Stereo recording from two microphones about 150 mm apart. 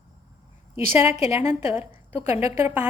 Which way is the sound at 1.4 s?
15° right (ahead or behind).